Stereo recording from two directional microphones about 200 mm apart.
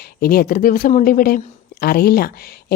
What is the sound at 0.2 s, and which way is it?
A woman's voice, 50° left (ahead or behind).